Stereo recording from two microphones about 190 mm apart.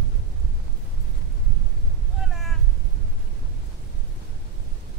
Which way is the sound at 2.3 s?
Centre (ahead or behind).